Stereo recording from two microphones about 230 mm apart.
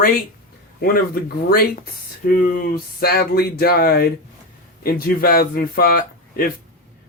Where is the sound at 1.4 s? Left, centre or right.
Left.